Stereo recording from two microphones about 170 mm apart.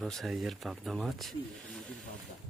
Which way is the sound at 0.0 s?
Centre (ahead or behind).